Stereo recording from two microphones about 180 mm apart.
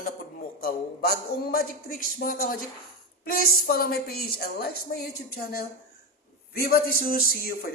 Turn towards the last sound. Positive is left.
turn(degrees=55)  # may be behind; listen again after turning